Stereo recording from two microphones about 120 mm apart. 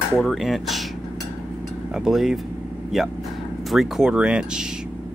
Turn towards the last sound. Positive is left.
turn(degrees=-5)  # may be behind; listen again after turning